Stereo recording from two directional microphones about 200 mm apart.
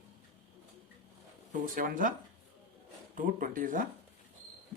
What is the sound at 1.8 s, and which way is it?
Speech, 40° right (ahead or behind).